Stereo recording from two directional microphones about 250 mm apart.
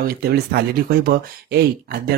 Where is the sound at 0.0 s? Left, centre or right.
Right.